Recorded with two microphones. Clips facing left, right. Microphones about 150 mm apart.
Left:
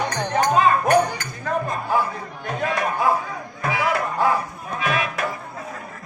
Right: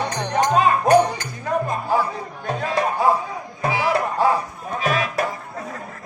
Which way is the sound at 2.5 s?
30° right (ahead or behind).